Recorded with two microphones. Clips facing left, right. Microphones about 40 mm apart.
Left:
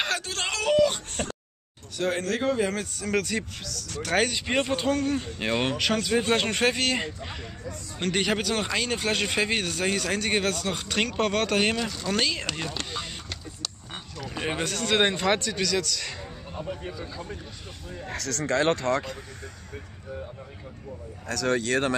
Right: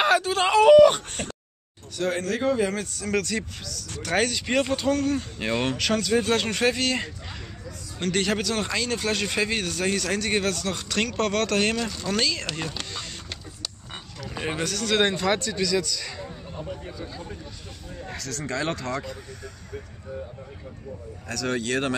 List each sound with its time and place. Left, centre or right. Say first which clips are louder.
0.0 s a sound: right 8 dB; centre
0.7 s wail: right 8 dB; right
2.0 s speech: right 1 dB; centre
4.3 s speech: right 2 dB; centre
8.0 s speech: right 1 dB; centre
11.8 s speech: right 1 dB; centre
12.2 s speech: right 1 dB; centre
14.2 s a sound: even; centre
14.5 s speech: right 1 dB; left
16.4 s a sound: left 3 dB; centre
18.1 s speech: left 4 dB; left
21.3 s speech: left 2 dB; left